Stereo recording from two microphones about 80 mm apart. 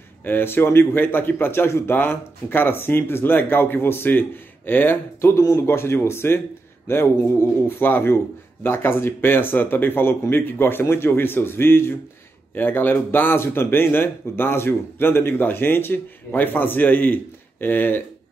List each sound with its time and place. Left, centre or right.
0.2 s speech: left